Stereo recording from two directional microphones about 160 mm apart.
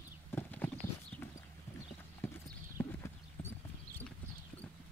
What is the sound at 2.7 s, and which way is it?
Clip-clop, 15° left (ahead or behind).